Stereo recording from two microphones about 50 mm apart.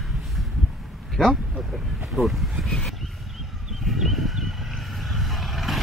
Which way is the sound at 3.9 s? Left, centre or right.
Centre.